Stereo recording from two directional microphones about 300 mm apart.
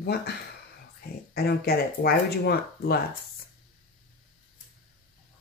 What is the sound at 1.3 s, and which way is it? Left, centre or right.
Speech, left.